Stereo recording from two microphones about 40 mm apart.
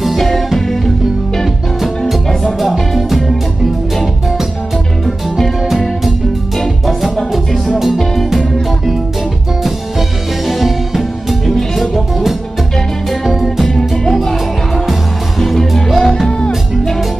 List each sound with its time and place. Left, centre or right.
0.0 s music: centre
1.8 s music: centre
5.6 s music: centre
7.3 s music: centre
16.3 s music: left